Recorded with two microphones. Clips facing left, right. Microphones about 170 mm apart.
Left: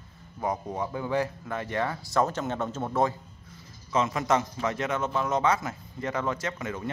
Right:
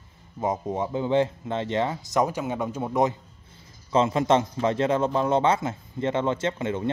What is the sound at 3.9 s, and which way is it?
A man's voice, 25° right (ahead or behind).